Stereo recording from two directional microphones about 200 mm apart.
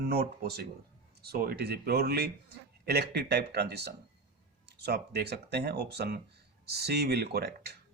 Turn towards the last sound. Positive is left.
turn(degrees=-55)  # may be behind; listen again after turning